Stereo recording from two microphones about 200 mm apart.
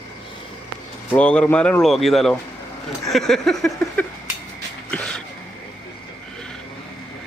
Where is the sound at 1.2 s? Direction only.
5° left (ahead or behind).